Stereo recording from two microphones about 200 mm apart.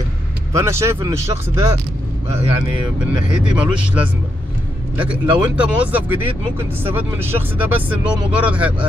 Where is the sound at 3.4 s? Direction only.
5° right (ahead or behind).